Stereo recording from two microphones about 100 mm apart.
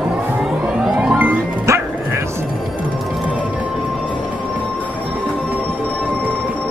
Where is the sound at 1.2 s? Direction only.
25° right (ahead or behind).